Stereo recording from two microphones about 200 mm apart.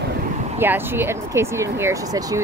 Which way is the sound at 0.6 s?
10° right (ahead or behind).